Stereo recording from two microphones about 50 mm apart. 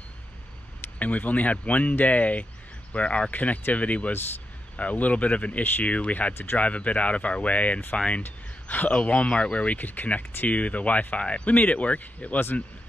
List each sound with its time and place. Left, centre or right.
0.9 s speech: left